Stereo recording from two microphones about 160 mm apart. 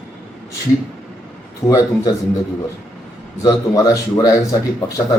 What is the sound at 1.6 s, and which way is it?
Speech, 20° left (ahead or behind).